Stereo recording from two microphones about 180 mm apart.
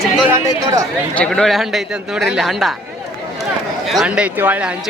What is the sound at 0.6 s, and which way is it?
Speech, 15° right (ahead or behind).